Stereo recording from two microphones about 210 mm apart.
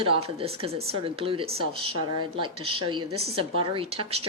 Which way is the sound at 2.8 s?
20° right (ahead or behind).